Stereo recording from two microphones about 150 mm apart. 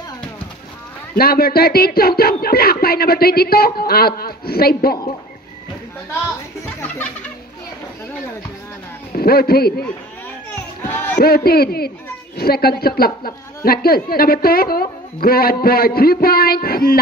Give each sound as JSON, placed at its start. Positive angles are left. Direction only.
{"t": 1.1, "sound": "speech", "side_deg": 90}
{"t": 6.6, "sound": "speech", "side_deg": 15}
{"t": 9.1, "sound": "speech", "side_deg": 90}
{"t": 10.5, "sound": "children playing", "side_deg": 15}
{"t": 11.1, "sound": "speech", "side_deg": 90}